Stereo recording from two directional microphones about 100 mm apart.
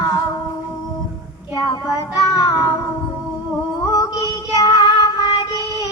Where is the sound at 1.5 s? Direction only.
50° left (ahead or behind).